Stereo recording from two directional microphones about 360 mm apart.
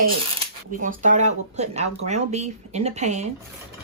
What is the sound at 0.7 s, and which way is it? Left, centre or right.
Speech, right.